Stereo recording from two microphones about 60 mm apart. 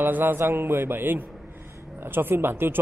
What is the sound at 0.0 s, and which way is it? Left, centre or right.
A man's voice, right.